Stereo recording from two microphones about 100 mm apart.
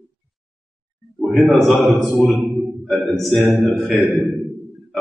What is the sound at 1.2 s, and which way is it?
A man's voice, centre (ahead or behind).